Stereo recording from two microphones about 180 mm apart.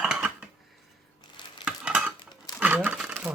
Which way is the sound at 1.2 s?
25° left (ahead or behind).